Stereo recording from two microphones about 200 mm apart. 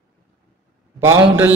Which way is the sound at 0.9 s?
10° right (ahead or behind).